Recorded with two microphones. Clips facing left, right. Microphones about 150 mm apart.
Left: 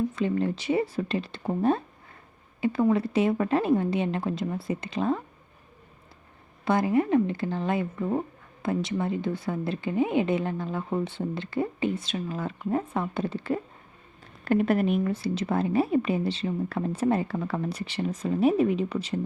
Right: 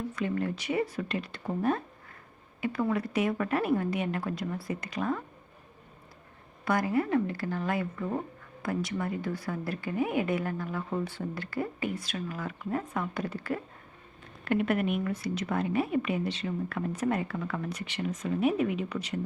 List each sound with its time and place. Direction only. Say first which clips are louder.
0.2 s a woman's voice: left 4 dB; 25° left (ahead or behind)
6.7 s a woman's voice: left 4 dB; 25° left (ahead or behind)
14.4 s a woman's voice: left 4 dB; 35° left (ahead or behind)